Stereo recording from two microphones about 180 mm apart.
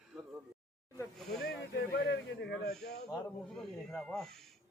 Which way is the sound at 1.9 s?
70° left (ahead or behind).